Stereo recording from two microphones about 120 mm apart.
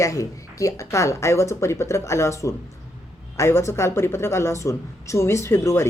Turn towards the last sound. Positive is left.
turn(degrees=25)  # may be behind; listen again after turning